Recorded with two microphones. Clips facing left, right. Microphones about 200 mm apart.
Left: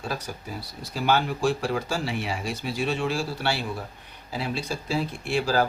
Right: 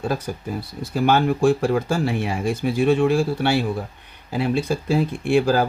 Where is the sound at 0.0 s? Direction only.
50° right (ahead or behind).